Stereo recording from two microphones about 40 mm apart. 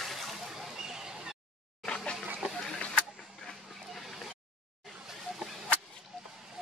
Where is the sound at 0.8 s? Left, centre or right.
Centre.